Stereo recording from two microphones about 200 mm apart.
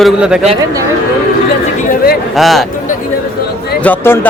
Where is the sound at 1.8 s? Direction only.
50° left (ahead or behind).